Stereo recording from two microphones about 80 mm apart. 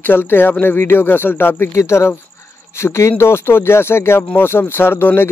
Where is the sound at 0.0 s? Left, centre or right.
Left.